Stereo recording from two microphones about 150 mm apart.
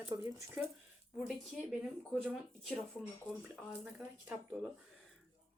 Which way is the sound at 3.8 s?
10° right (ahead or behind).